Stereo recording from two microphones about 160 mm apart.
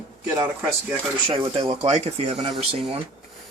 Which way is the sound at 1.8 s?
45° right (ahead or behind).